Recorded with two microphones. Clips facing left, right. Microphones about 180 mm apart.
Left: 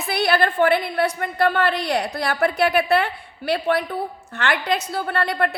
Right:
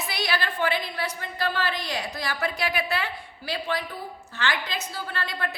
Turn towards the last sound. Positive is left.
turn(degrees=60)  # may be behind; listen again after turning